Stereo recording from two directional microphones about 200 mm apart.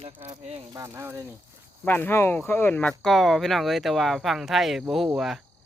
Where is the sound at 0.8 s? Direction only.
15° right (ahead or behind).